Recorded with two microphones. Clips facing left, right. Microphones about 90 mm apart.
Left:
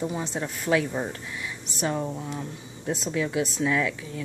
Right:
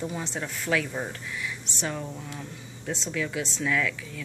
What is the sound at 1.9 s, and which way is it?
Speech, 25° left (ahead or behind).